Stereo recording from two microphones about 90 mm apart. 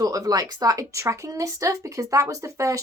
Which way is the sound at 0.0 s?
40° right (ahead or behind).